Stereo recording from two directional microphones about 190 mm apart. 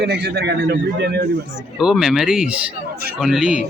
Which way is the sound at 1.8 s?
5° right (ahead or behind).